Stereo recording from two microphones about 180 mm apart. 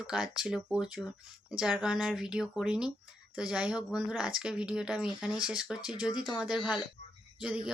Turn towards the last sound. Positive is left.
turn(degrees=-5)  # may be behind; listen again after turning